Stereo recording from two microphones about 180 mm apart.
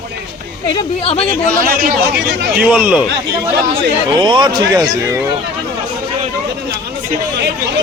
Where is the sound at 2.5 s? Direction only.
5° right (ahead or behind).